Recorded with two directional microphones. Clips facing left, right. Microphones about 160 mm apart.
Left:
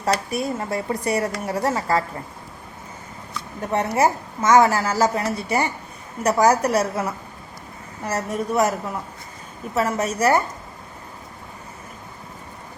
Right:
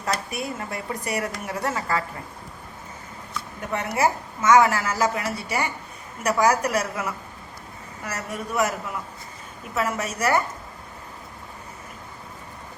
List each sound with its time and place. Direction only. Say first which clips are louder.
0.0 s speech: left 5 dB; 35° left (ahead or behind)
3.9 s speech: even; 35° left (ahead or behind)